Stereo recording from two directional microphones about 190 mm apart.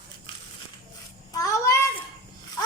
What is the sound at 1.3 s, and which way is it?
Child singing, 15° left (ahead or behind).